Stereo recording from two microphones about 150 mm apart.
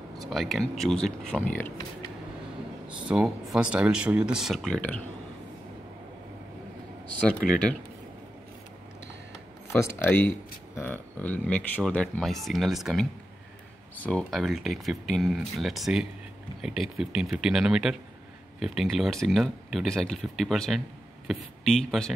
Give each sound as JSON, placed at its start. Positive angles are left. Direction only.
{"t": 0.2, "sound": "speech", "side_deg": 0}
{"t": 3.1, "sound": "speech", "side_deg": -5}
{"t": 7.4, "sound": "speech", "side_deg": 70}
{"t": 9.8, "sound": "speech", "side_deg": 15}
{"t": 13.9, "sound": "speech", "side_deg": 10}